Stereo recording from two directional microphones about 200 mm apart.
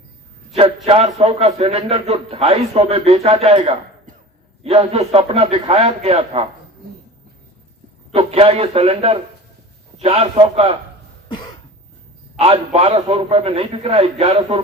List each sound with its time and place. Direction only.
0.5 s a man's voice: 30° right (ahead or behind)
8.1 s a man's voice: 30° right (ahead or behind)
12.4 s a man's voice: 25° right (ahead or behind)